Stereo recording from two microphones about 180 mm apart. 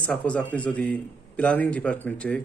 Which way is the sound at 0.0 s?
5° left (ahead or behind).